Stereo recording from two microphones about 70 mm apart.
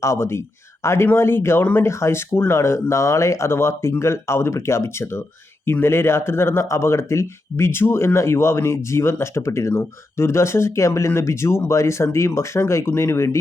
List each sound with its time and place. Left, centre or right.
0.0 s a man's voice: left